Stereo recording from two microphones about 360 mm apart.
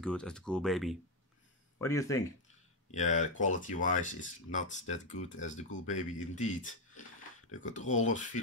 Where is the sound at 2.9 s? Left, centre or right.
Centre.